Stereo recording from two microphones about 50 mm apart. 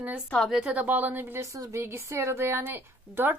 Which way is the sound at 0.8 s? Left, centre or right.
Right.